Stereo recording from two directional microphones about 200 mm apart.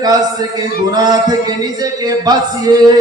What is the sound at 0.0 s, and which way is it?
A man's voice, 20° right (ahead or behind).